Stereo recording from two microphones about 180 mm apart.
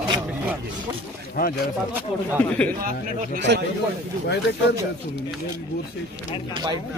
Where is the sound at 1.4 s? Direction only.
50° left (ahead or behind).